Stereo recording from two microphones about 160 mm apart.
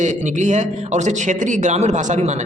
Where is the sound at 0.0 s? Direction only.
50° right (ahead or behind).